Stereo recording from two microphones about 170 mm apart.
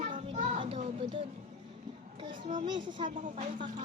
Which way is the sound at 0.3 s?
45° right (ahead or behind).